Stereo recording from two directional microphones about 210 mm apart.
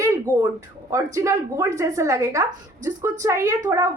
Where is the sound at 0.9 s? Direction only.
15° right (ahead or behind).